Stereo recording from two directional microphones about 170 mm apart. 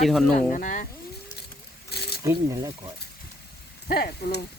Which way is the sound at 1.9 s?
70° left (ahead or behind).